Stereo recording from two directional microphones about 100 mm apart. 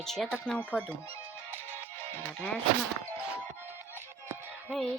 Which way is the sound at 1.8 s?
20° left (ahead or behind).